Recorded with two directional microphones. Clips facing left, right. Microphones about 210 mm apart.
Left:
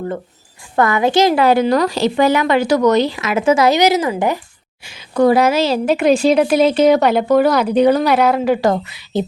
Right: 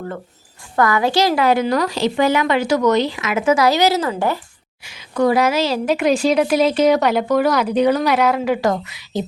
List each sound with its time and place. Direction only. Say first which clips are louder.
0.8 s a woman's voice: left 3 dB; 20° left (ahead or behind)
1.5 s speech: left 3 dB; 35° left (ahead or behind); by 4.4 s 15° left (ahead or behind)
4.8 s a woman's voice: left 4 dB; 30° left (ahead or behind)